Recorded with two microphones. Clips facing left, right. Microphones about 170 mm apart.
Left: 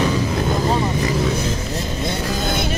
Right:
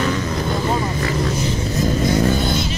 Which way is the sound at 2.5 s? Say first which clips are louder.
Even; 55° left (ahead or behind).